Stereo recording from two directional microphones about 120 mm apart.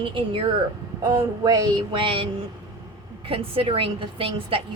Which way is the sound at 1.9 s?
45° right (ahead or behind).